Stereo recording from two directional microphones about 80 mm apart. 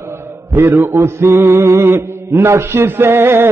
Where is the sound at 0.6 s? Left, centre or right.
Right.